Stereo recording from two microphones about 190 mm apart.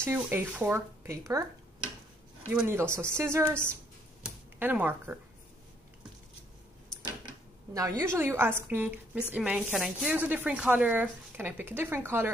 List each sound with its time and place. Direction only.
0.0 s speech: 10° right (ahead or behind)
2.5 s speech: 10° right (ahead or behind)
8.0 s speech: 15° right (ahead or behind)